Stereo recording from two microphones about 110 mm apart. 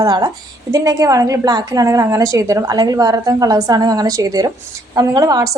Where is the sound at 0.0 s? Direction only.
40° right (ahead or behind).